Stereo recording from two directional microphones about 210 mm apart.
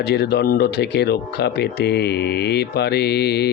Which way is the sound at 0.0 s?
50° left (ahead or behind).